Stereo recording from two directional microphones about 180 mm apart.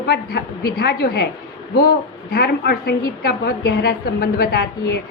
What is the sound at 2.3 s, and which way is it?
A woman's voice, 60° left (ahead or behind).